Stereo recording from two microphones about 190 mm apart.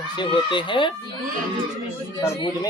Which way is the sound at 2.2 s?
25° left (ahead or behind).